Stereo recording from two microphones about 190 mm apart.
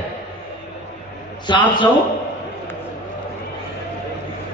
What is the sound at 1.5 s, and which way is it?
Speech, 25° left (ahead or behind).